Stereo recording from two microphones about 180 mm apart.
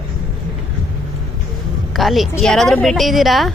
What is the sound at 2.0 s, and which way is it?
A woman's voice, centre (ahead or behind).